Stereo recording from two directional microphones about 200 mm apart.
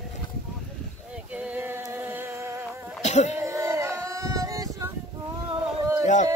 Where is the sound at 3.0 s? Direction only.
35° left (ahead or behind).